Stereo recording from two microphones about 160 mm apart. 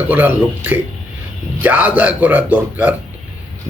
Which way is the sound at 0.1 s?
10° right (ahead or behind).